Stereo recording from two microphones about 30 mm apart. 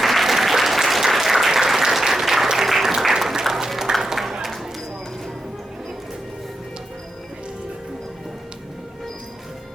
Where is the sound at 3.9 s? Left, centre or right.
Right.